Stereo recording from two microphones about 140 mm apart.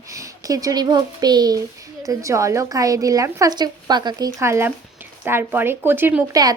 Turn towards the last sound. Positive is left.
turn(degrees=-15)  # may be behind; listen again after turning